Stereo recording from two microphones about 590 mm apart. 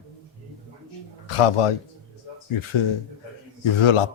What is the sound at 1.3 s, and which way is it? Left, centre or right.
A man's voice, left.